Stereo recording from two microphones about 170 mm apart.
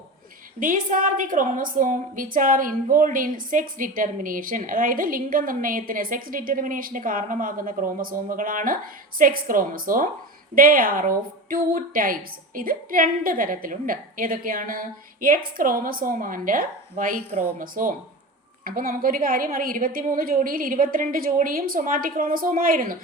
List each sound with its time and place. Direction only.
0.6 s a woman's voice: 50° right (ahead or behind)